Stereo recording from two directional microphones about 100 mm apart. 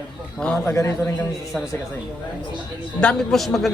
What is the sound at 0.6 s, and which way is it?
Speech, 30° left (ahead or behind).